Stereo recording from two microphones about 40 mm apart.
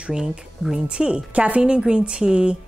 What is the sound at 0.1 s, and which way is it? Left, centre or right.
A woman's voice, right.